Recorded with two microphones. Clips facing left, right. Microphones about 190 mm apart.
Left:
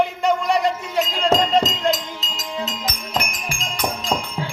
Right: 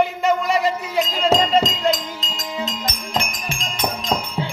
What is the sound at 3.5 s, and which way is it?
Music, 25° right (ahead or behind).